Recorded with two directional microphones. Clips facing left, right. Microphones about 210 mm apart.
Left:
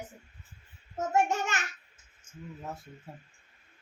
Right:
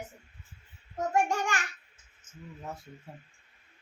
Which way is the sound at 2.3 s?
10° left (ahead or behind).